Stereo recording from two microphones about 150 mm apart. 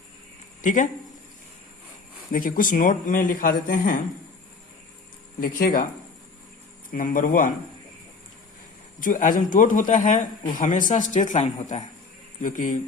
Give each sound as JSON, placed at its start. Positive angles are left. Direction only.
{"t": 0.6, "sound": "speech", "side_deg": 60}
{"t": 2.3, "sound": "a man's voice", "side_deg": 65}
{"t": 5.4, "sound": "speech", "side_deg": 70}
{"t": 6.9, "sound": "a man's voice", "side_deg": 65}
{"t": 9.0, "sound": "a man's voice", "side_deg": 60}